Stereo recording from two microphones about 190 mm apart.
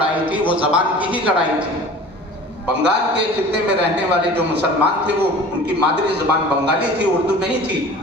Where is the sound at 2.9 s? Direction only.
65° right (ahead or behind).